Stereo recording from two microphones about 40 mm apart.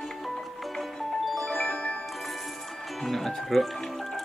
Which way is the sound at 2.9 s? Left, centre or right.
Centre.